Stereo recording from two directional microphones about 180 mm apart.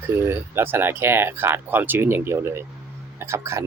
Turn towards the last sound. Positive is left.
turn(degrees=-15)  # may be behind; listen again after turning